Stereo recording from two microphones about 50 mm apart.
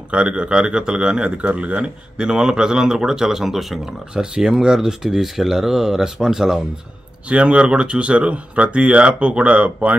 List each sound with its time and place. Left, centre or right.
0.1 s speech: right; by 3.9 s centre
4.1 s speech: centre
7.2 s speech: right